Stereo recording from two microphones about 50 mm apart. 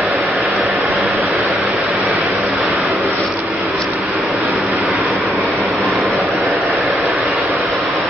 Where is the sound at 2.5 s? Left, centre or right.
Right.